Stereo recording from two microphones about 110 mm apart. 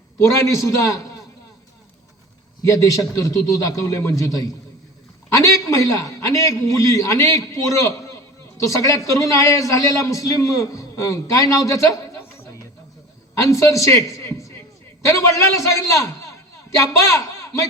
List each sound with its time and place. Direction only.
0.2 s a man's voice: 25° left (ahead or behind)
2.6 s a man's voice: 30° left (ahead or behind)
5.3 s a man's voice: 25° left (ahead or behind)
13.3 s a man's voice: 30° left (ahead or behind)
14.3 s a sound: 25° left (ahead or behind)
15.0 s a man's voice: 25° left (ahead or behind)